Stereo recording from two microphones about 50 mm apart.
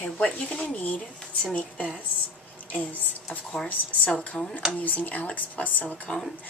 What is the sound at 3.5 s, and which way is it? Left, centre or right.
Speech, centre.